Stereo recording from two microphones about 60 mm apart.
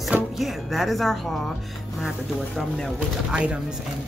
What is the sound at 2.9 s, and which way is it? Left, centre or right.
Speech, centre.